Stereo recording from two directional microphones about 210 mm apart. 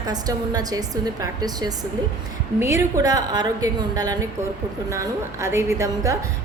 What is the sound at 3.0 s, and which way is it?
A woman's voice, 15° right (ahead or behind).